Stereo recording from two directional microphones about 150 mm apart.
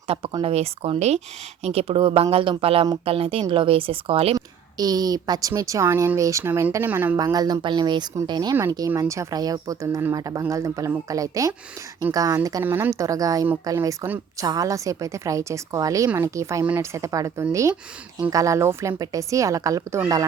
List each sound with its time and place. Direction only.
0.1 s speech: 40° right (ahead or behind)
4.4 s a woman's voice: 25° right (ahead or behind)
7.2 s a woman's voice: 25° right (ahead or behind)